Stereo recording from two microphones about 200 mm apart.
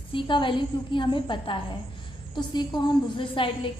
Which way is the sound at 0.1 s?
25° left (ahead or behind).